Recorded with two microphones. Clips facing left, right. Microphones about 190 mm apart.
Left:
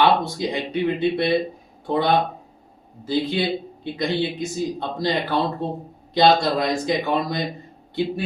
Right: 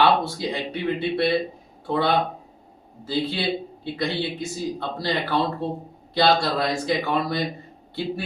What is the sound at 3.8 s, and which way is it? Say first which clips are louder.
Speech: left 4 dB; 20° left (ahead or behind).